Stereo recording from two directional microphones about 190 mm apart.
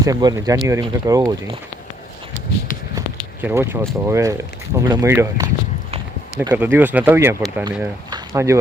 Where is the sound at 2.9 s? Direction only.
10° right (ahead or behind).